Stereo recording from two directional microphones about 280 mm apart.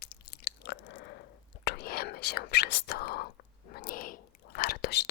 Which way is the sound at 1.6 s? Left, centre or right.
Left.